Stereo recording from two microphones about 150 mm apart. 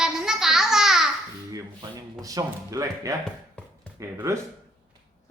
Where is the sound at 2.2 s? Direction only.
25° right (ahead or behind).